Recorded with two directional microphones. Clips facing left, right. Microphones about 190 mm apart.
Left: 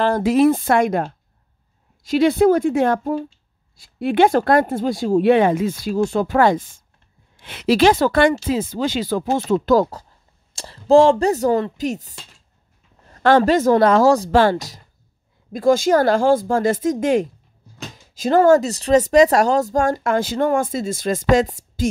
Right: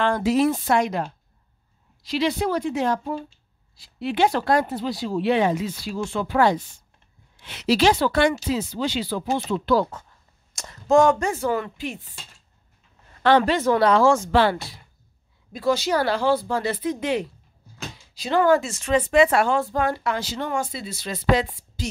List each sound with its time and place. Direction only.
0.0 s speech: 45° left (ahead or behind)